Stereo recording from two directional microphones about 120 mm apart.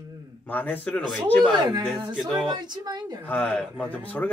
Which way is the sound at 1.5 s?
35° right (ahead or behind).